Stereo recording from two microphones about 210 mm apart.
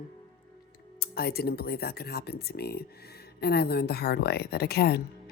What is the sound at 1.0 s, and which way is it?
Speech, 45° left (ahead or behind).